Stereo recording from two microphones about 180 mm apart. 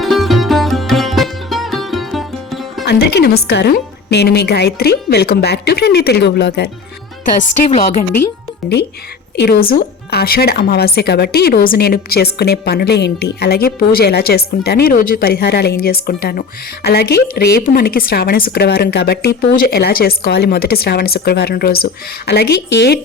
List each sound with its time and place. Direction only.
0.0 s music: centre (ahead or behind)
2.8 s a woman's voice: 70° left (ahead or behind)
9.3 s a woman's voice: 65° left (ahead or behind)